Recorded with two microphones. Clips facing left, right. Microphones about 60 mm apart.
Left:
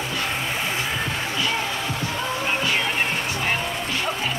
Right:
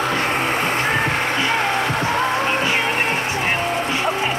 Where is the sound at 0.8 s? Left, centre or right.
Right.